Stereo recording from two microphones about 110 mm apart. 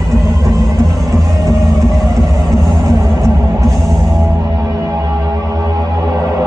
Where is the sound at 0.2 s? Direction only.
30° right (ahead or behind).